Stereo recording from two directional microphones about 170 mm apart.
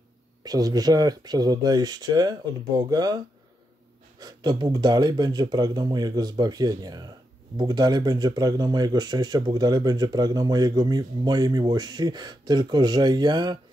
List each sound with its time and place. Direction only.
0.4 s speech: 20° right (ahead or behind)
4.2 s speech: 25° right (ahead or behind)